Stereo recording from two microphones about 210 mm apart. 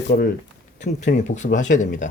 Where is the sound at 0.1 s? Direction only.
45° left (ahead or behind).